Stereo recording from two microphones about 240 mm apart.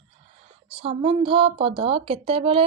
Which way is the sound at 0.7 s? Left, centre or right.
Right.